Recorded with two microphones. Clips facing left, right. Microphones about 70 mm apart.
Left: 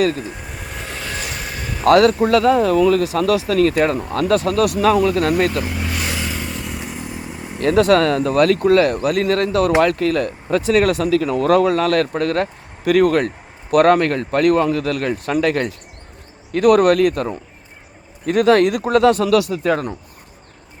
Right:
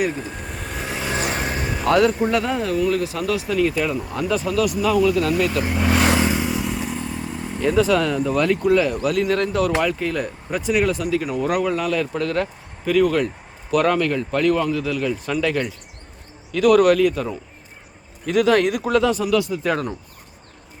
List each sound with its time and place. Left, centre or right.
0.3 s vehicle: centre
1.1 s vehicle: right
1.8 s speech: left
2.2 s speech: left
5.9 s vehicle: right
6.3 s motorcycle: centre
7.6 s speech: left
9.0 s speech: left
9.2 s speech: left
9.8 s speech: left
12.1 s speech: left
16.5 s speech: left
19.0 s speech: left
19.6 s speech: left